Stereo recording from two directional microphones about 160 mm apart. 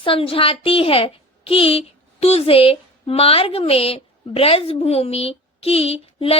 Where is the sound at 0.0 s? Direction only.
35° left (ahead or behind).